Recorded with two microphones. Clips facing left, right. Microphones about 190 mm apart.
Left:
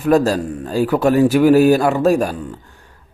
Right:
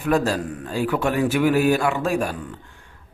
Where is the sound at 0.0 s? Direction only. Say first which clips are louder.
Left 6 dB; 40° left (ahead or behind).